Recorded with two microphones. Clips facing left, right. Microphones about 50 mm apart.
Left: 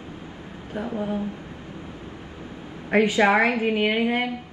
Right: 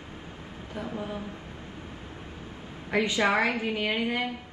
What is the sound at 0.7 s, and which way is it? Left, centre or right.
Speech, left.